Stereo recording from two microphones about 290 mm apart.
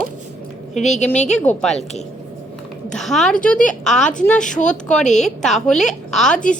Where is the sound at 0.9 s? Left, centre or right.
Left.